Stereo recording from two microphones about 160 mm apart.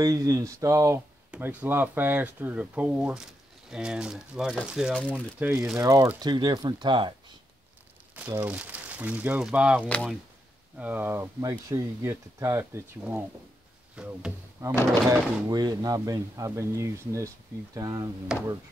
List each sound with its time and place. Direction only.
0.0 s speech: 20° right (ahead or behind); by 5.0 s centre (ahead or behind)
5.4 s speech: 15° right (ahead or behind)
8.4 s speech: 10° right (ahead or behind)
9.8 s speech: 10° left (ahead or behind)
10.8 s speech: 10° right (ahead or behind)
13.9 s speech: 5° right (ahead or behind)
14.6 s speech: 15° right (ahead or behind)